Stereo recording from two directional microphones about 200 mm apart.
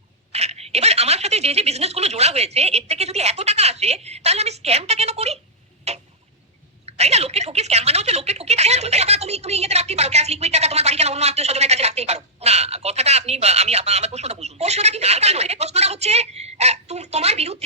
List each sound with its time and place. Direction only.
0.3 s a woman's voice: 30° right (ahead or behind)
5.9 s tick-tock: 30° right (ahead or behind)
6.9 s a woman's voice: 30° right (ahead or behind)